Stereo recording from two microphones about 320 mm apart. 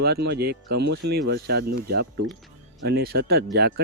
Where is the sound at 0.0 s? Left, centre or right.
Right.